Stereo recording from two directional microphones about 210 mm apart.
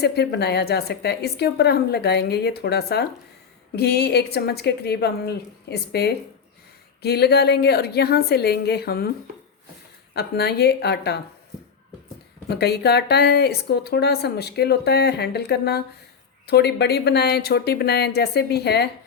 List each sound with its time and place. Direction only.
0.0 s a woman's voice: 50° left (ahead or behind)
10.2 s a woman's voice: 50° left (ahead or behind)
12.5 s a woman's voice: 50° left (ahead or behind)